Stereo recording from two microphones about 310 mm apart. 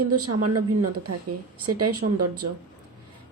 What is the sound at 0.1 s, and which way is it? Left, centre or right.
A woman's voice, right.